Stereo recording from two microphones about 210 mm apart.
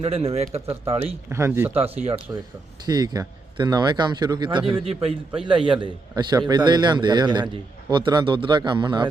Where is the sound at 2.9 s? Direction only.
20° right (ahead or behind).